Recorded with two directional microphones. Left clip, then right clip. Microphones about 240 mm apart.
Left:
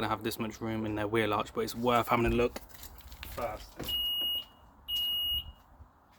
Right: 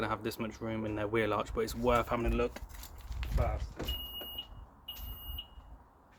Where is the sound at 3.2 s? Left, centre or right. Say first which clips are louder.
Even; centre.